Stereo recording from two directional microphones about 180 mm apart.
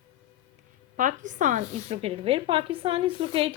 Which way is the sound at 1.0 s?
45° right (ahead or behind).